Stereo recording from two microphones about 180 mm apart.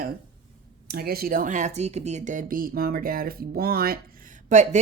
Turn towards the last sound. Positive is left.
turn(degrees=-40)  # may be behind; listen again after turning